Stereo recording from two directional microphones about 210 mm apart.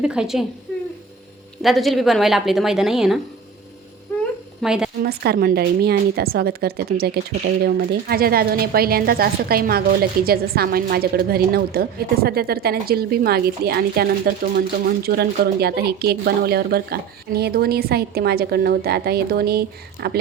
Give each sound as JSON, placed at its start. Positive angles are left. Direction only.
{"t": 0.0, "sound": "a woman's voice", "side_deg": -5}
{"t": 1.6, "sound": "a woman's voice", "side_deg": 0}
{"t": 4.6, "sound": "a woman's voice", "side_deg": -5}
{"t": 5.0, "sound": "a woman's voice", "side_deg": -50}